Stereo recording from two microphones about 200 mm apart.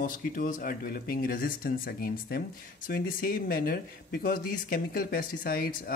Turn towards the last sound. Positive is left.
turn(degrees=45)  # may be behind; listen again after turning